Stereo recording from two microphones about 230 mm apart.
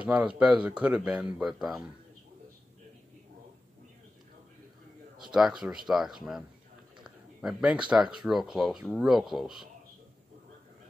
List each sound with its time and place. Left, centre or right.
0.0 s speech: centre
5.3 s speech: centre